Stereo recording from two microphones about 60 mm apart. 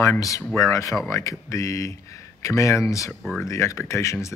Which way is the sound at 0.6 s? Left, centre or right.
Left.